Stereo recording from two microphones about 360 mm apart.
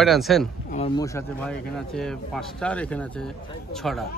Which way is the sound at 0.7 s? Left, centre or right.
Centre.